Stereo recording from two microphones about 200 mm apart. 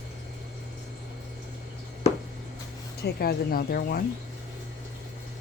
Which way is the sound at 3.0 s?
50° left (ahead or behind).